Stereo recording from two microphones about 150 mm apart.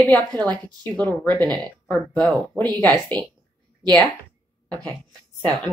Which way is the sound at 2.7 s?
10° left (ahead or behind).